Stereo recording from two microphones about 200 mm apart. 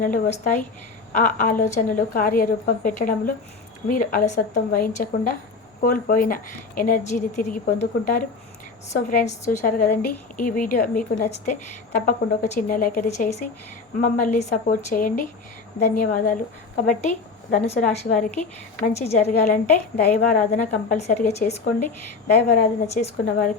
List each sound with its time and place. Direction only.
0.0 s a woman's voice: 40° left (ahead or behind)
9.9 s a woman's voice: 10° left (ahead or behind)
10.3 s a woman's voice: 40° left (ahead or behind)
20.3 s a woman's voice: 40° left (ahead or behind)